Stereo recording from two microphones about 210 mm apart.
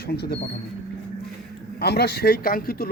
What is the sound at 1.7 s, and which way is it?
Speech, 50° left (ahead or behind).